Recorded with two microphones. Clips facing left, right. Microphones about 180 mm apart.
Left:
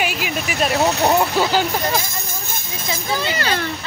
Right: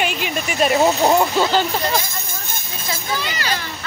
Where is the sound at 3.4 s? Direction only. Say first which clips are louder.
Left 3 dB; 60° left (ahead or behind).